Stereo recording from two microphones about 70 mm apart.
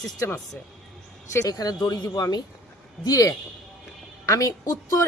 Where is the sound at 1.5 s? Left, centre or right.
Left.